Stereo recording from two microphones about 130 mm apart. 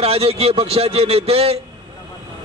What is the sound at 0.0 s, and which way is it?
A man's voice, 50° right (ahead or behind).